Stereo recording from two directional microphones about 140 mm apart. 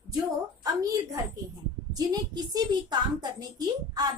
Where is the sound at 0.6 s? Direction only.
25° right (ahead or behind).